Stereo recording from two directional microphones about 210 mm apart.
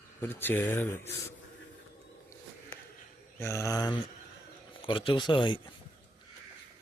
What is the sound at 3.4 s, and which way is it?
A man's voice, 15° left (ahead or behind).